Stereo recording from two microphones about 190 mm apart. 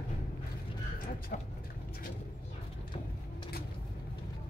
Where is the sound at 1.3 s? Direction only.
45° left (ahead or behind).